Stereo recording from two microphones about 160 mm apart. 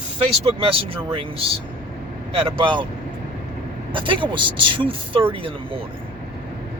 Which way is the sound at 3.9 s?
30° right (ahead or behind).